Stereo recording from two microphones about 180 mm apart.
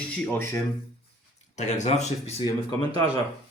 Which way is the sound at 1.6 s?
40° left (ahead or behind).